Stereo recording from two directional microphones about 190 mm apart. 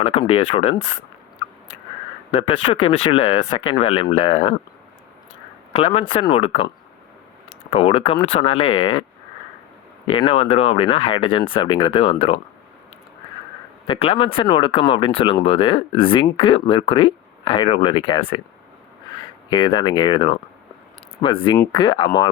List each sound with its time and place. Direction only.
0.0 s speech: 30° left (ahead or behind)
2.6 s speech: 30° left (ahead or behind)
5.7 s speech: 30° left (ahead or behind)
7.7 s speech: 30° left (ahead or behind)
10.1 s speech: 30° left (ahead or behind)
13.8 s speech: 30° left (ahead or behind)
19.5 s speech: 25° left (ahead or behind)